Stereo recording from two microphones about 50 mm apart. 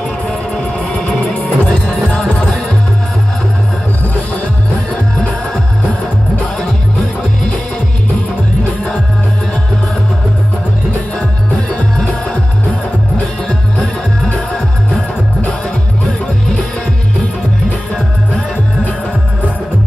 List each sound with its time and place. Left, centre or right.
1.3 s music: left